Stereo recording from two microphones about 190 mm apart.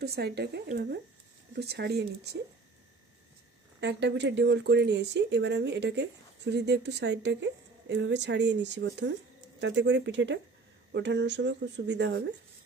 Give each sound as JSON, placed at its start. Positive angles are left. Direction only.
{"t": 0.0, "sound": "speech", "side_deg": -55}
{"t": 3.8, "sound": "speech", "side_deg": -65}